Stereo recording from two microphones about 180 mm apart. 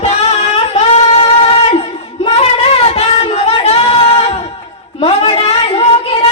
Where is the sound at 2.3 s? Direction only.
35° left (ahead or behind).